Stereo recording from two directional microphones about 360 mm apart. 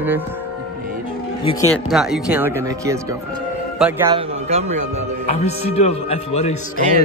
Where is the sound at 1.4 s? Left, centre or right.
Centre.